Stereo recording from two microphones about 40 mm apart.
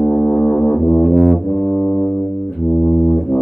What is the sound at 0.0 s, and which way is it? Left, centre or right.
Music, centre.